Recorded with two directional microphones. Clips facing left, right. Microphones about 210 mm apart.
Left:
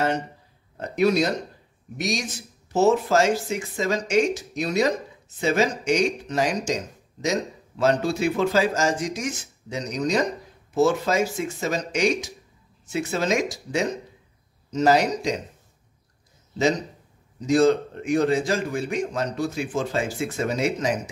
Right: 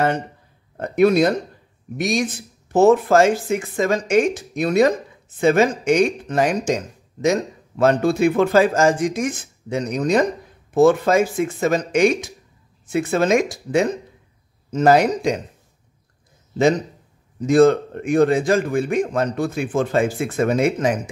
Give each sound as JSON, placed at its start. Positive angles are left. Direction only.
{"t": 0.7, "sound": "speech", "side_deg": -55}
{"t": 17.4, "sound": "a man's voice", "side_deg": -55}